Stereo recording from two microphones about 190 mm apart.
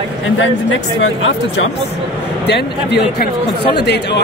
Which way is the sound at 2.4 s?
60° left (ahead or behind).